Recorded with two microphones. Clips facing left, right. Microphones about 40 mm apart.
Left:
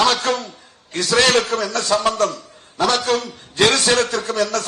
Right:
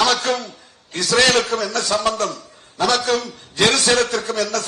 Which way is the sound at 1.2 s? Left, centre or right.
Left.